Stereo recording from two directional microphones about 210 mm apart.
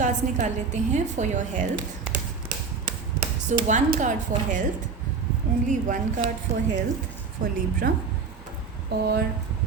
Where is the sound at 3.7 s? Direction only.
40° right (ahead or behind).